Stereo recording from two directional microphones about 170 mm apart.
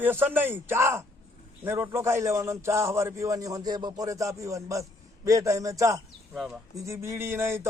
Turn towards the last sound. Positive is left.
turn(degrees=-15)  # may be behind; listen again after turning